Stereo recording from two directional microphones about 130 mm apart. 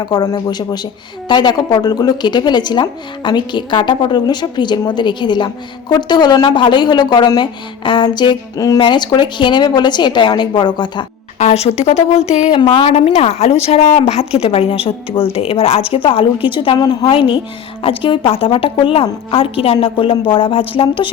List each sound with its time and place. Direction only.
0.0 s a woman's voice: 30° left (ahead or behind)
11.3 s speech: 55° left (ahead or behind)
12.5 s a woman's voice: 40° left (ahead or behind)